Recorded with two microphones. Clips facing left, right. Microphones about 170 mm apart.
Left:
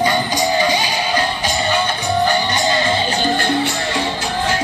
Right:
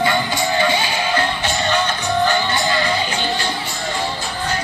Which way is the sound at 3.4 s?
65° left (ahead or behind).